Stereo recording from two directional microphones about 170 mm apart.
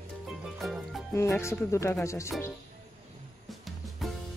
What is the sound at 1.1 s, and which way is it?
Speech, 15° left (ahead or behind).